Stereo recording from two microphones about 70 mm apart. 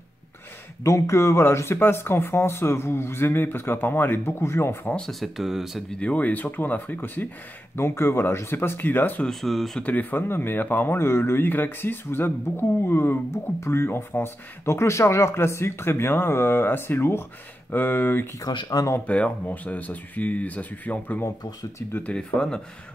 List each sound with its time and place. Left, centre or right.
0.8 s speech: left
4.9 s speech: centre
5.4 s speech: centre
5.9 s speech: centre
7.7 s speech: left
9.2 s speech: centre
9.8 s speech: left
18.5 s speech: left
18.9 s speech: centre
22.1 s speech: centre